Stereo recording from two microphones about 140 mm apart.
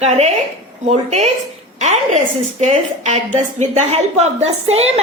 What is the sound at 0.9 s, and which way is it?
Speech, 55° right (ahead or behind).